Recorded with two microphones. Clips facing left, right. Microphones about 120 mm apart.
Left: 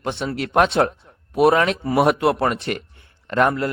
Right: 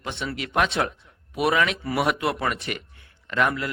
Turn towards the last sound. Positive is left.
turn(degrees=40)  # may be behind; listen again after turning